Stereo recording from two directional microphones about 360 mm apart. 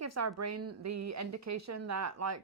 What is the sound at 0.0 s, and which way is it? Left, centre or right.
Speech, right.